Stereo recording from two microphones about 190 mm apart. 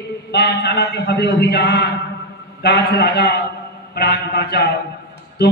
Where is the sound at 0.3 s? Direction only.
60° left (ahead or behind).